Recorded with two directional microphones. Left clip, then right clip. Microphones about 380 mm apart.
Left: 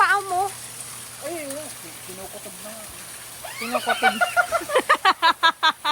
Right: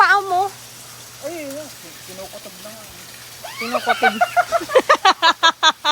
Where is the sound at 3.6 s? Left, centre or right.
Centre.